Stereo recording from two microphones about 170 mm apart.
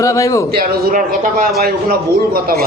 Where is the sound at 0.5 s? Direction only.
60° right (ahead or behind).